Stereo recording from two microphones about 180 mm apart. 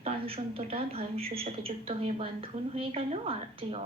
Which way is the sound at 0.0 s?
30° right (ahead or behind).